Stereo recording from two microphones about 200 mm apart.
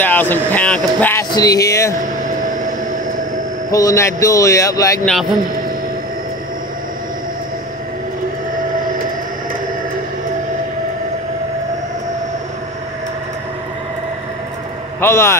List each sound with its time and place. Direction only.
0.0 s speech: 10° left (ahead or behind)
1.3 s speech: 20° left (ahead or behind)
2.0 s vehicle: 40° right (ahead or behind)
3.7 s speech: 15° left (ahead or behind)
15.0 s speech: 10° left (ahead or behind)